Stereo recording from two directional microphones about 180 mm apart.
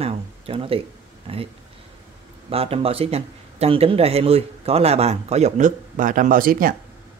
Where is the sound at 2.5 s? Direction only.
30° right (ahead or behind).